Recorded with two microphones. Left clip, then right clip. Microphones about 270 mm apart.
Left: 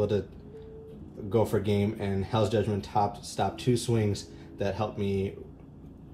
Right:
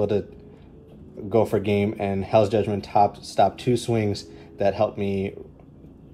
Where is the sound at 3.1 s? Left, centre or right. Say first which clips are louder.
Right 10 dB; centre.